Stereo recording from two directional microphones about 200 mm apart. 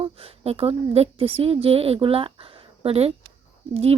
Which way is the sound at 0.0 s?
30° right (ahead or behind).